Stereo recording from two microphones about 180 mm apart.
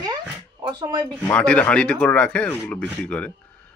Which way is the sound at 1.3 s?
5° left (ahead or behind).